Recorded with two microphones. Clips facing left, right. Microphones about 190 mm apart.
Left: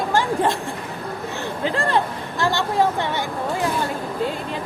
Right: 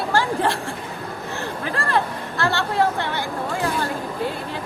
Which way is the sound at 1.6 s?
20° left (ahead or behind).